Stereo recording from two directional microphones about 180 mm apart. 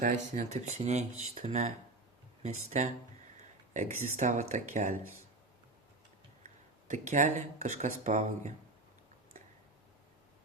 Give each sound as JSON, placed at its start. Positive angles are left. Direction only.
{"t": 0.0, "sound": "speech", "side_deg": -45}
{"t": 4.2, "sound": "speech", "side_deg": -40}
{"t": 6.8, "sound": "speech", "side_deg": -45}